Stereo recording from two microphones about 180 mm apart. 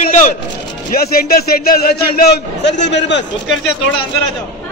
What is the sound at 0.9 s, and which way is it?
A man's voice, 55° left (ahead or behind).